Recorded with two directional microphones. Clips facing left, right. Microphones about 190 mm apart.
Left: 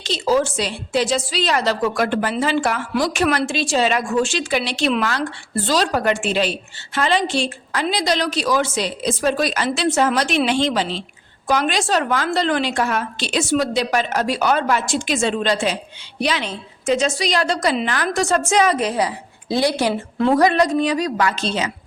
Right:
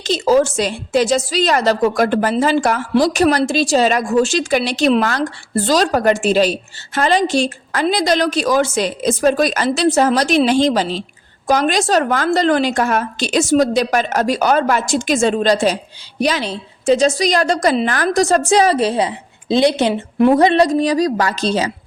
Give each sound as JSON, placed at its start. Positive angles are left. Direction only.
{"t": 0.0, "sound": "a woman's voice", "side_deg": -45}
{"t": 20.7, "sound": "a woman's voice", "side_deg": -35}